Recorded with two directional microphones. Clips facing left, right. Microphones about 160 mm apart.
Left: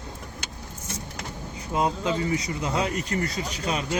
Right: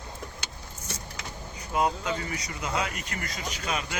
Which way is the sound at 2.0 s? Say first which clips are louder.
Left 7 dB; 25° left (ahead or behind).